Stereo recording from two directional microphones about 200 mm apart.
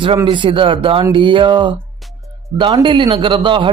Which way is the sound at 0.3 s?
25° right (ahead or behind).